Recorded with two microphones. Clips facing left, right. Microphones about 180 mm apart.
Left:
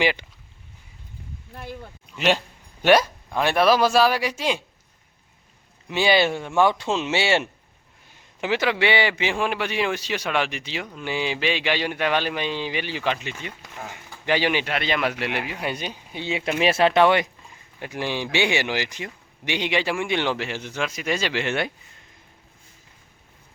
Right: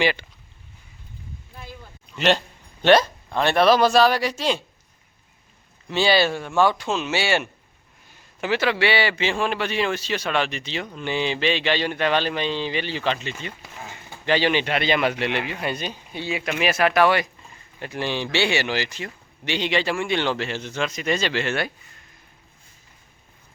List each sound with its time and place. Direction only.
0.0 s speech: 15° left (ahead or behind)
2.1 s speech: 10° left (ahead or behind)
5.9 s speech: 15° left (ahead or behind)